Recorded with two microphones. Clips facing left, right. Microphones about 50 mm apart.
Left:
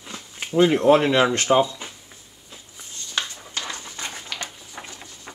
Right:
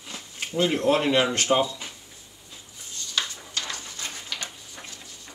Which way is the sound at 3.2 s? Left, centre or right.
Left.